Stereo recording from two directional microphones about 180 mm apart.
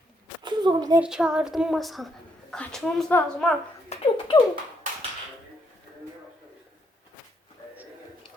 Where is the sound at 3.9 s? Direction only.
35° left (ahead or behind).